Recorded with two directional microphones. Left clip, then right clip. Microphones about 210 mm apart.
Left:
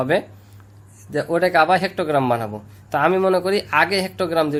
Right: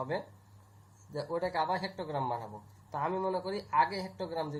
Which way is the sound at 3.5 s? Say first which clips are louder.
Left 12 dB; 50° left (ahead or behind).